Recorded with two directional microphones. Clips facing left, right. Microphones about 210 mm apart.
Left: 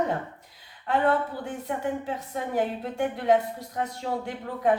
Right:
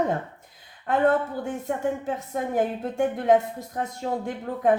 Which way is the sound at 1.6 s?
45° right (ahead or behind).